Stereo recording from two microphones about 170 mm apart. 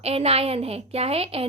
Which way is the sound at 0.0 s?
35° right (ahead or behind).